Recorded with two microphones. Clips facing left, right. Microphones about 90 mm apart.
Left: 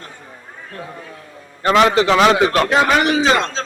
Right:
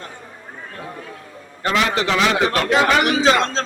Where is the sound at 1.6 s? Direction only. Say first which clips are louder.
Left 6 dB; 40° left (ahead or behind).